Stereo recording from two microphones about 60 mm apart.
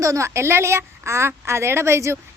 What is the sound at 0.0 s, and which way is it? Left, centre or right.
A woman's voice, right.